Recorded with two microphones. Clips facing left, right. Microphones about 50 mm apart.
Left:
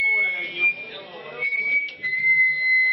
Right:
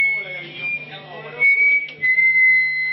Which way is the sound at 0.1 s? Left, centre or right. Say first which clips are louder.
Left 3 dB; left.